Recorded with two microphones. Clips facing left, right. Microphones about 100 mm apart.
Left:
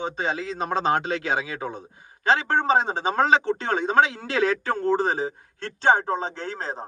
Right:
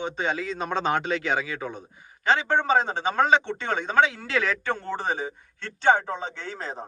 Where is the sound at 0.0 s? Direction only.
35° left (ahead or behind).